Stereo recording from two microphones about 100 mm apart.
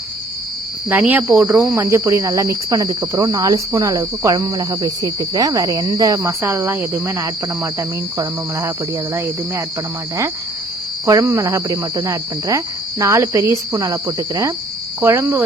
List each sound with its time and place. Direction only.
0.9 s speech: 20° right (ahead or behind)
1.5 s speech: 30° right (ahead or behind)
11.0 s speech: 35° right (ahead or behind)